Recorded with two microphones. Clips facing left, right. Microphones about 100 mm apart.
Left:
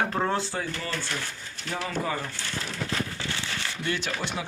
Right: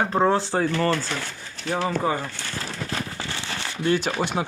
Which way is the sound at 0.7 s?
75° right (ahead or behind).